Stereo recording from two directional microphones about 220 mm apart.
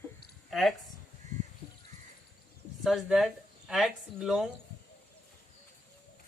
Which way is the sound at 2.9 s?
Centre (ahead or behind).